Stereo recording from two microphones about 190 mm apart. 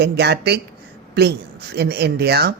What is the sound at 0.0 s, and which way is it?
Speech, 60° right (ahead or behind).